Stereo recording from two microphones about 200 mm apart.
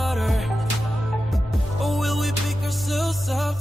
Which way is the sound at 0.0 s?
Centre (ahead or behind).